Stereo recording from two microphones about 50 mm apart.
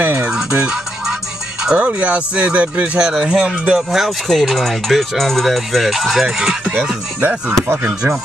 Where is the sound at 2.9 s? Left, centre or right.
Centre.